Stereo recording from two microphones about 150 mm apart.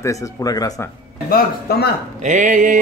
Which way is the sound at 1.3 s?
90° left.